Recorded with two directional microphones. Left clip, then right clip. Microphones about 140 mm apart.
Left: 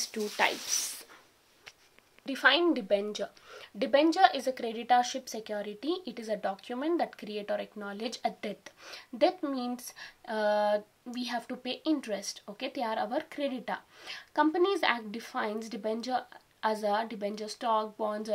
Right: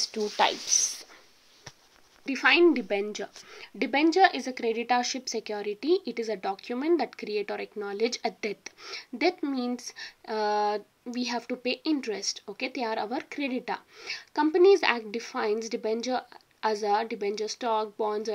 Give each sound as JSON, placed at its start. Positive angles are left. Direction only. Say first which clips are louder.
{"t": 0.4, "sound": "speech", "louder": "right 5 dB", "side_deg": -30}
{"t": 2.3, "sound": "speech", "louder": "right 4 dB", "side_deg": -10}